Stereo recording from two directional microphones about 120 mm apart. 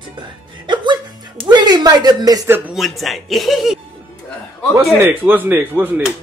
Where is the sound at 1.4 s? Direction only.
35° right (ahead or behind).